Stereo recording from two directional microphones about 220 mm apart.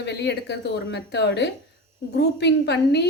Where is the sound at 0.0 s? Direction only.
50° left (ahead or behind).